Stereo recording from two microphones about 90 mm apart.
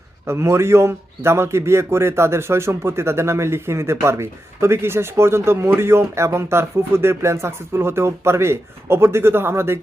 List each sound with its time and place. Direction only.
0.3 s a man's voice: 30° right (ahead or behind)